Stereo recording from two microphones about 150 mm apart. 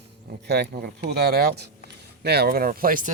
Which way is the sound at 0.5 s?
90° right.